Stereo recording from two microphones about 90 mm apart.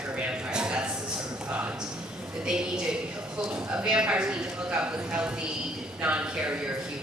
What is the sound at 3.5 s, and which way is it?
Speech, 10° right (ahead or behind).